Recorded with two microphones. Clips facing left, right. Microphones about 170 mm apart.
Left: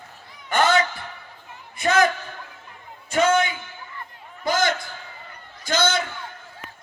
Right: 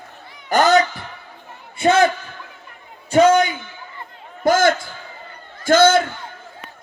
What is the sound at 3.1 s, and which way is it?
Speech, 35° right (ahead or behind).